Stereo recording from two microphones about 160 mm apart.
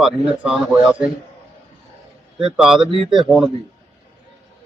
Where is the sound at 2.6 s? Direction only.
5° right (ahead or behind).